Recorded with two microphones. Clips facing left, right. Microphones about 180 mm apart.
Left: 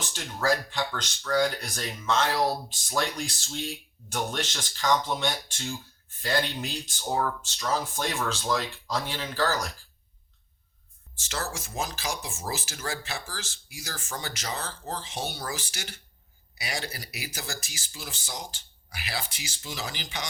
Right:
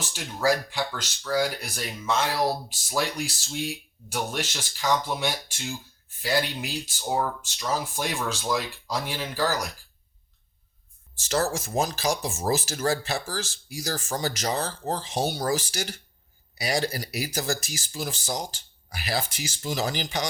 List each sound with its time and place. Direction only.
0.0 s speech: 10° right (ahead or behind)
11.2 s speech: 40° right (ahead or behind)